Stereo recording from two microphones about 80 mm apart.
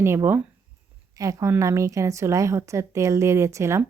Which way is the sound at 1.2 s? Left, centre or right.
Right.